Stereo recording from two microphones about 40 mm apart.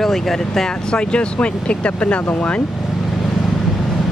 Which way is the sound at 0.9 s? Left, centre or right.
Left.